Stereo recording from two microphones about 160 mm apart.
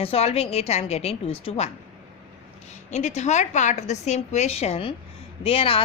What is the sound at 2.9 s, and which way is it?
A woman's voice, 45° left (ahead or behind).